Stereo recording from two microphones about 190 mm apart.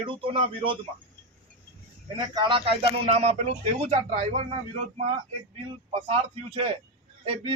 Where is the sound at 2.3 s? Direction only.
25° right (ahead or behind).